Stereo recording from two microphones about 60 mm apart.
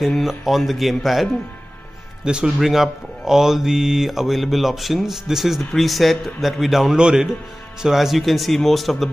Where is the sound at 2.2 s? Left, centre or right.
Centre.